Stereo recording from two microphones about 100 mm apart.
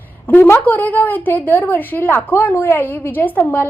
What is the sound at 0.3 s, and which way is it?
A woman's voice, 20° left (ahead or behind).